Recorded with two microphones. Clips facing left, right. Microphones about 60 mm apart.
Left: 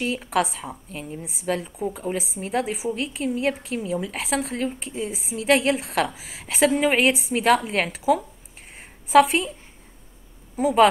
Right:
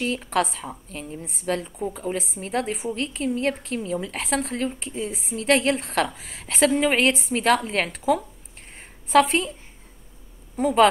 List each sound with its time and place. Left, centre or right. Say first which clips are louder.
0.0 s a woman's voice: even; centre
8.7 s a sound: left 2 dB; centre
10.5 s speech: left 1 dB; centre